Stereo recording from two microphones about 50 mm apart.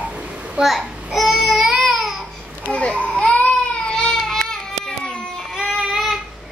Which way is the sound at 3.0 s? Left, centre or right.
Centre.